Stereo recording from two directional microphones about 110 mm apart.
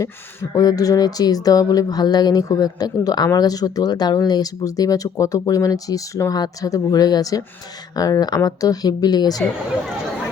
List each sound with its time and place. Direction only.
0.5 s speech: 35° left (ahead or behind)